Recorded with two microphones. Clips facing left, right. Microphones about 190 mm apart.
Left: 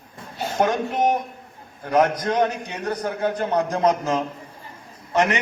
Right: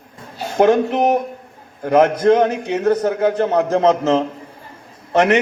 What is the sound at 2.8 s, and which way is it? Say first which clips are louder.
Speech: right 8 dB; 50° right (ahead or behind).